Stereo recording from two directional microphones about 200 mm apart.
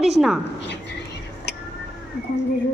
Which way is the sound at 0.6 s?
60° left (ahead or behind).